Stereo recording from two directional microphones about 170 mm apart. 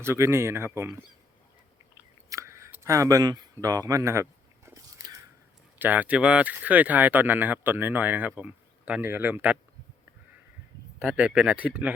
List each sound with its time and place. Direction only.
0.0 s speech: 15° right (ahead or behind)
2.3 s a sound: 15° right (ahead or behind)
5.8 s speech: 10° right (ahead or behind)
11.0 s speech: centre (ahead or behind)